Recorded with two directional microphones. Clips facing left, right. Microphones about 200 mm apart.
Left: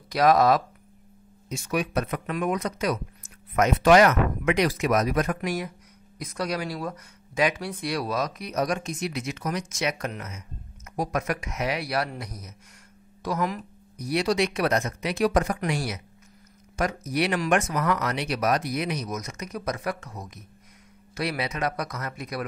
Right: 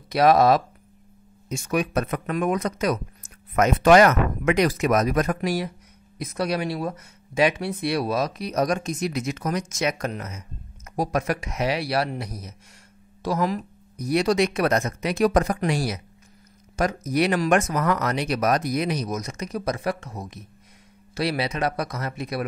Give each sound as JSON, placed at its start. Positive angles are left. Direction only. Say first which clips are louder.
{"t": 0.1, "sound": "speech", "louder": "right 2 dB", "side_deg": -25}
{"t": 1.5, "sound": "speech", "louder": "right 3 dB", "side_deg": -50}
{"t": 13.9, "sound": "speech", "louder": "right 3 dB", "side_deg": -45}